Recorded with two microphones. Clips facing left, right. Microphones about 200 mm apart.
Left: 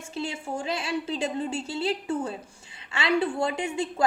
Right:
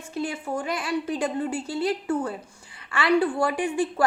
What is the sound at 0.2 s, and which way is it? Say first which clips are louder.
A woman's voice: right 3 dB; 25° left (ahead or behind).